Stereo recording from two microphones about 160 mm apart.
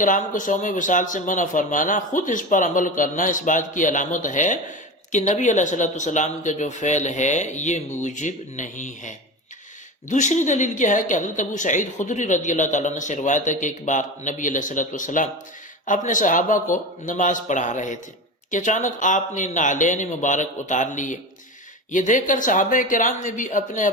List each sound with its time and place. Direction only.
0.0 s a woman's voice: 55° left (ahead or behind)